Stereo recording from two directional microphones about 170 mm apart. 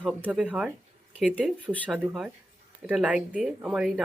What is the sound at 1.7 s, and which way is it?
Speech, 10° left (ahead or behind).